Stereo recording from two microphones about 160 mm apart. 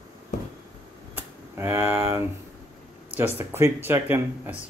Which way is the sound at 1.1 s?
15° right (ahead or behind).